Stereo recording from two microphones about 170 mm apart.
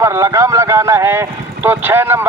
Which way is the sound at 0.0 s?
15° right (ahead or behind).